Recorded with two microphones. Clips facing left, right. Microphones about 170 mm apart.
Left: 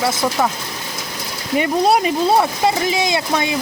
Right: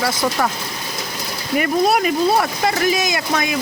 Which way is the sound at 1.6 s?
30° left (ahead or behind).